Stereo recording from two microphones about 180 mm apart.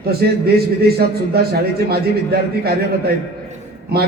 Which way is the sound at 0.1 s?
60° right (ahead or behind).